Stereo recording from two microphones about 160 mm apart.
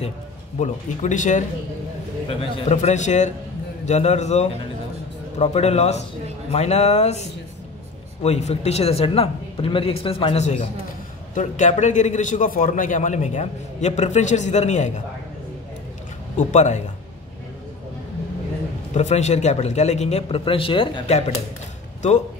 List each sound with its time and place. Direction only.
0.6 s a man's voice: 50° left (ahead or behind)
2.2 s a man's voice: 40° left (ahead or behind)
16.3 s a man's voice: 50° left (ahead or behind)
18.9 s a man's voice: 45° left (ahead or behind)